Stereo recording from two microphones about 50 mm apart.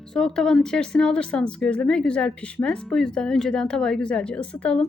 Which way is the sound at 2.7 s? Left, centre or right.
Centre.